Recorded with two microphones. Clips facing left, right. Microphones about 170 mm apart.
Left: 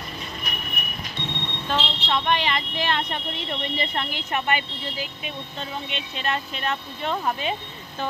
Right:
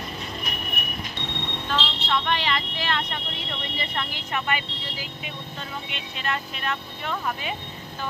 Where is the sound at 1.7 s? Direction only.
20° left (ahead or behind).